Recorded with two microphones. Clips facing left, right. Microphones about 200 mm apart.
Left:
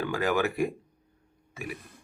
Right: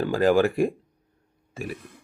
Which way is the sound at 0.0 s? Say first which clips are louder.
Right 7 dB; 30° right (ahead or behind).